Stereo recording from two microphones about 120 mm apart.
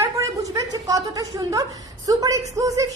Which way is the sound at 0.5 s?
30° right (ahead or behind).